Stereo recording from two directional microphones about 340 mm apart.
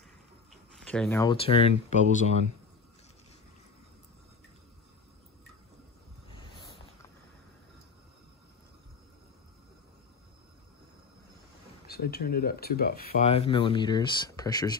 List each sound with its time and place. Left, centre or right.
0.7 s speech: centre
6.3 s a sound: centre
11.8 s speech: left; by 14.8 s centre